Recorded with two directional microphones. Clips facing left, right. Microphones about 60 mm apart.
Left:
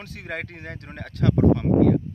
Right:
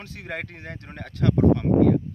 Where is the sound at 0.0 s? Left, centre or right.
Centre.